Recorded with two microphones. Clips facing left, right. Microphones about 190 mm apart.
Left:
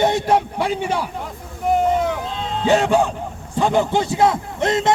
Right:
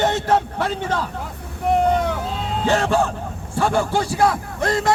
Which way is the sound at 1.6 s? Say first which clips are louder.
Even; centre (ahead or behind).